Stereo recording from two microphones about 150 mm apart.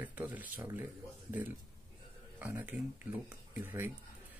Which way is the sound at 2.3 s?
10° right (ahead or behind).